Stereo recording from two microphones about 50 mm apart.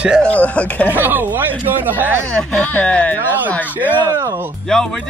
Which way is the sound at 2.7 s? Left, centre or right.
Left.